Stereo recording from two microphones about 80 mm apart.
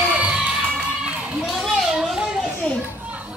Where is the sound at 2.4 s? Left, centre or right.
Centre.